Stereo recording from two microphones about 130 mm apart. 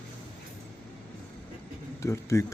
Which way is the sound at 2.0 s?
25° left (ahead or behind).